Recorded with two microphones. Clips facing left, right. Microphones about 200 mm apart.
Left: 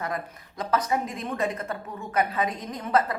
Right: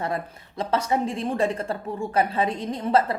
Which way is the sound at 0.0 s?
30° right (ahead or behind).